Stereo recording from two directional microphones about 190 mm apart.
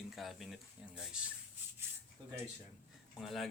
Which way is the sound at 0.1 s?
Centre (ahead or behind).